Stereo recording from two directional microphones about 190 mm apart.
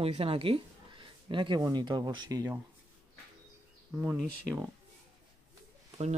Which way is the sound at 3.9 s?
10° right (ahead or behind).